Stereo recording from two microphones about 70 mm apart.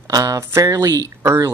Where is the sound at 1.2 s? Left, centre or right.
Right.